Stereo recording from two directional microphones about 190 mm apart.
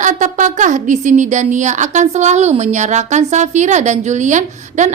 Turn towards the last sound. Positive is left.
turn(degrees=-40)  # may be behind; listen again after turning